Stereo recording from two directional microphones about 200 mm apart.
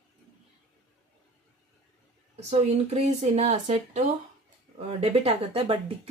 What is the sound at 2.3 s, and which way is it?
Speech, 35° right (ahead or behind).